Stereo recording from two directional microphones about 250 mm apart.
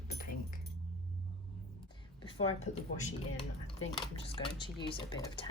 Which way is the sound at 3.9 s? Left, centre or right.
Left.